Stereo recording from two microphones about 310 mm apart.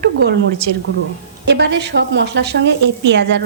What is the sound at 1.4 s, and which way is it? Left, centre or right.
A woman's voice, right.